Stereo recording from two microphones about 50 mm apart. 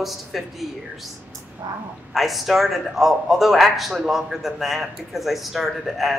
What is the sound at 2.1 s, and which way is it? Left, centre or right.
Speech, centre.